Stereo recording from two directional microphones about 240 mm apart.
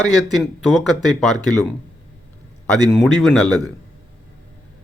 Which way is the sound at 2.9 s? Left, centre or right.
Centre.